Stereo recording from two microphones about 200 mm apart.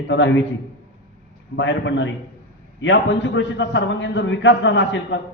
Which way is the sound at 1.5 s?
65° left (ahead or behind).